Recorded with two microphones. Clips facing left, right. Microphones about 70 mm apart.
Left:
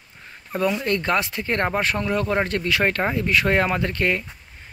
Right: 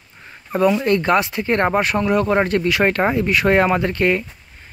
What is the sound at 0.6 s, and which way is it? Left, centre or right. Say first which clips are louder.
Speech: right 6 dB; right.